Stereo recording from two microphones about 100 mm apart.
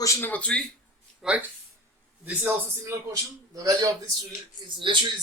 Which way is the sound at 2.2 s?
20° right (ahead or behind).